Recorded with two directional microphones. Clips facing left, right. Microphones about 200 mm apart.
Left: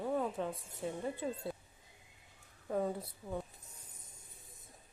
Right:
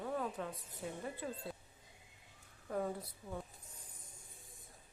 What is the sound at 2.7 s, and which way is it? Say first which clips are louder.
Speech: left 4 dB; 25° left (ahead or behind).